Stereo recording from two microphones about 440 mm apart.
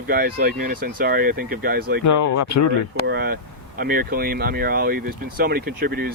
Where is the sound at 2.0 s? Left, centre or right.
Left.